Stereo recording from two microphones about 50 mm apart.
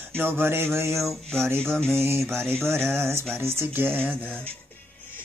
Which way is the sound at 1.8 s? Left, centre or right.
Right.